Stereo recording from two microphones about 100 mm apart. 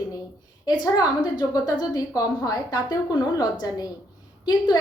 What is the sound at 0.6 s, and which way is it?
A woman's voice, 45° left (ahead or behind).